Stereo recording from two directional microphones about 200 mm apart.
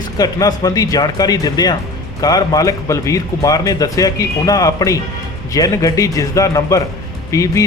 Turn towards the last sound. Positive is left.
turn(degrees=15)  # may be behind; listen again after turning